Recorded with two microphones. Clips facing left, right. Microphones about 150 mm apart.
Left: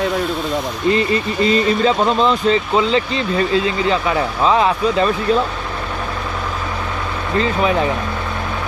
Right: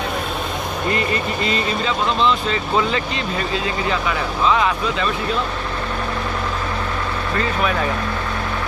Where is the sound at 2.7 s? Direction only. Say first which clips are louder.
Left 4 dB; 25° left (ahead or behind).